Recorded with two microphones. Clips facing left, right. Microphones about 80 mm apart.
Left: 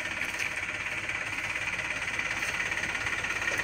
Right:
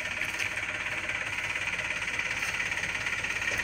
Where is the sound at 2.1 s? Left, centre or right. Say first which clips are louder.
Even; left.